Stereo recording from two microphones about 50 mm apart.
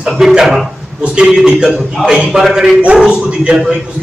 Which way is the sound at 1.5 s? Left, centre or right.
Right.